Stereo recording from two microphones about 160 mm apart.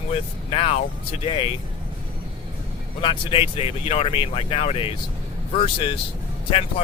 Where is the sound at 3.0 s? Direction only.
30° left (ahead or behind).